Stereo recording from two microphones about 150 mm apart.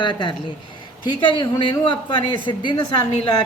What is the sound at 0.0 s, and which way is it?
A woman's voice, 30° left (ahead or behind).